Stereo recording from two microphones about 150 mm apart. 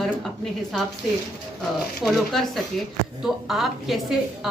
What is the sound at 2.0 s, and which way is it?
A woman's voice, centre (ahead or behind).